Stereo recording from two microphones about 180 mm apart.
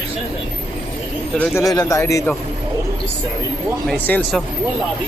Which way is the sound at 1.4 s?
15° left (ahead or behind).